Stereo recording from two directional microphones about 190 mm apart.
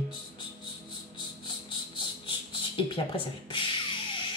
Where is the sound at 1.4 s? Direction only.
25° left (ahead or behind).